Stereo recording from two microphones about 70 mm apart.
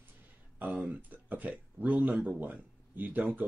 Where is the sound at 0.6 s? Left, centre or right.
Right.